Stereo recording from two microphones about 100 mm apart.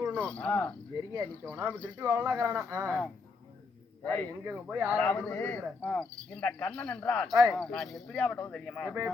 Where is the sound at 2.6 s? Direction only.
30° right (ahead or behind).